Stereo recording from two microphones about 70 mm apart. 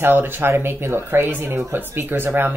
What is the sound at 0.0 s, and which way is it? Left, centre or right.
Speech, right.